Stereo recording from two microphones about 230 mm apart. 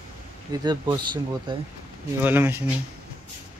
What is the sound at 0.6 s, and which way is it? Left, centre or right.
Speech, centre.